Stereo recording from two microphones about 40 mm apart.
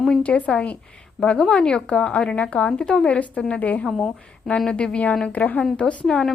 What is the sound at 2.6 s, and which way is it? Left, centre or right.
Speech, left.